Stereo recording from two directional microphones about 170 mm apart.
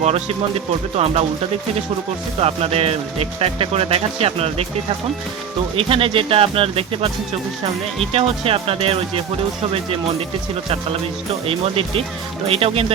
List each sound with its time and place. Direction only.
0.0 s speech: 35° right (ahead or behind)
2.4 s speech: 35° right (ahead or behind)
5.7 s speech: 35° right (ahead or behind)
8.1 s speech: 35° right (ahead or behind)
11.4 s speech: 35° right (ahead or behind)